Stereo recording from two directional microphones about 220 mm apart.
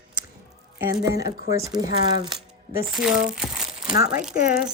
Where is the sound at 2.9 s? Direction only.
5° right (ahead or behind).